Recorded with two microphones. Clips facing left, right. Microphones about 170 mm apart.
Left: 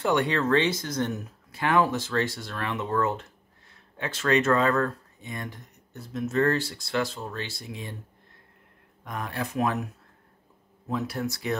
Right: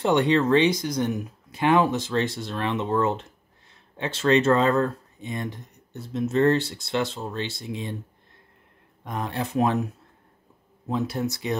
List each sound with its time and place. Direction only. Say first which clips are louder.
0.0 s speech: right 4 dB; 20° right (ahead or behind)
9.0 s speech: right 3 dB; 25° right (ahead or behind)
10.9 s speech: right 3 dB; 25° right (ahead or behind)